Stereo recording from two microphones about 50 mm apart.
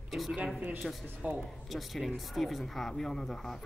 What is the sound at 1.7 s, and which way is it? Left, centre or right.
Speech, centre.